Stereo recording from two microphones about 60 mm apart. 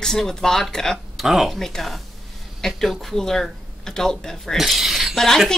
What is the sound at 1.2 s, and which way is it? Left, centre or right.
Speech, centre.